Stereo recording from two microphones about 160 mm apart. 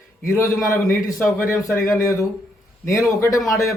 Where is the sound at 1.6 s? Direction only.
15° left (ahead or behind).